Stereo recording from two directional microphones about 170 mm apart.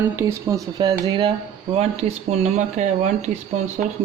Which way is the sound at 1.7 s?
40° right (ahead or behind).